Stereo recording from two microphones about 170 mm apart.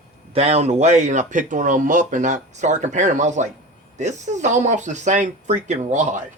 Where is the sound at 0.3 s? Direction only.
40° right (ahead or behind).